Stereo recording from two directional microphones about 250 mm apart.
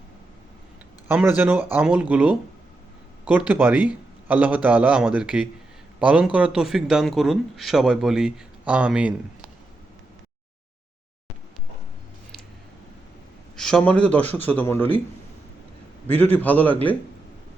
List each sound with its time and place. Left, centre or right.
1.0 s a man's voice: centre
13.6 s speech: centre
16.0 s speech: centre